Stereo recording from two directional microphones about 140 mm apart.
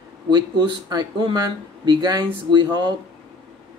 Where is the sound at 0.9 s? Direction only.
30° right (ahead or behind).